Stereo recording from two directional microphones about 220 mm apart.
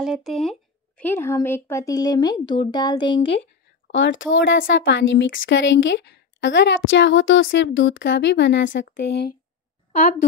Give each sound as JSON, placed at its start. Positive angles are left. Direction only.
{"t": 0.0, "sound": "speech", "side_deg": 0}
{"t": 3.8, "sound": "speech", "side_deg": 55}